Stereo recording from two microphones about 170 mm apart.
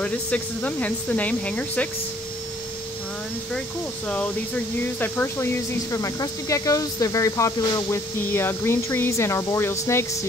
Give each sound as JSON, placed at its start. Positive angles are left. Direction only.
{"t": 0.0, "sound": "speech", "side_deg": 5}
{"t": 5.0, "sound": "speech", "side_deg": 10}